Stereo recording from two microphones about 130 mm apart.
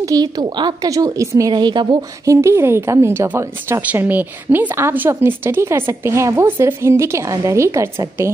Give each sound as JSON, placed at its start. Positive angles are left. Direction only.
{"t": 0.0, "sound": "a woman's voice", "side_deg": -30}
{"t": 2.2, "sound": "a woman's voice", "side_deg": -20}